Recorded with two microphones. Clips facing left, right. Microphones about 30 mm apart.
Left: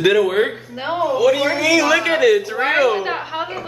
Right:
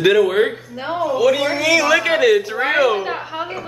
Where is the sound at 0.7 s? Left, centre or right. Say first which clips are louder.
Left 2 dB; centre.